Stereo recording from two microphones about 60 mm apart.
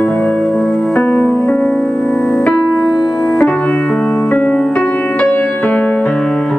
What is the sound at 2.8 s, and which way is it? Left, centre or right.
Music, centre.